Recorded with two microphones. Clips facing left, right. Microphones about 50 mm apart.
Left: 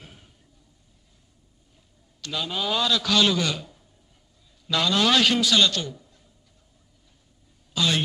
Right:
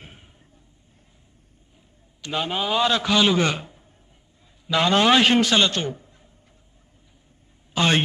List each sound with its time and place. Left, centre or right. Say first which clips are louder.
0.0 s a sound: right 2 dB; right
2.3 s a man's voice: right 4 dB; right
3.3 s a man's voice: right 5 dB; right
7.7 s a man's voice: right 4 dB; right